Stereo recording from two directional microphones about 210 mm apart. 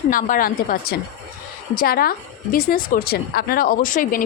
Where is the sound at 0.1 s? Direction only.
40° left (ahead or behind).